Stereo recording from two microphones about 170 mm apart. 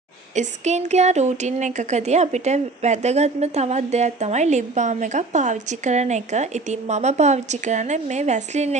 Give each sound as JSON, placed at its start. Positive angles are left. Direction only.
{"t": 0.3, "sound": "speech", "side_deg": -45}